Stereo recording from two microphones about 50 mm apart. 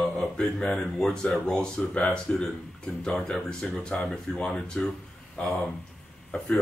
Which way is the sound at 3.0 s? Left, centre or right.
Centre.